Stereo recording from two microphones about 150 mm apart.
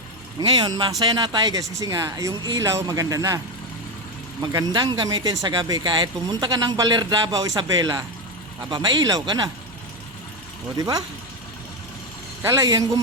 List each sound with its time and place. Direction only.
0.3 s speech: 30° right (ahead or behind)
4.7 s speech: 30° right (ahead or behind)
10.8 s speech: 25° right (ahead or behind)
12.4 s speech: 20° right (ahead or behind)